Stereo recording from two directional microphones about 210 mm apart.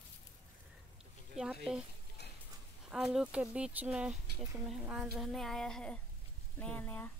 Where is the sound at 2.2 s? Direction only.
50° left (ahead or behind).